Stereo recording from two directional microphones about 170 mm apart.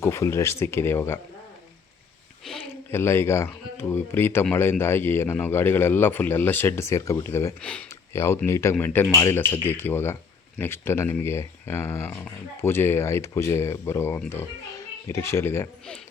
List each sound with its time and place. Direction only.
0.0 s speech: 15° left (ahead or behind)
2.5 s a sound: centre (ahead or behind)
2.9 s speech: 15° left (ahead or behind)